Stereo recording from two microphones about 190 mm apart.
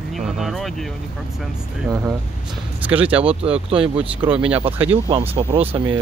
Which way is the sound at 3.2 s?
30° right (ahead or behind).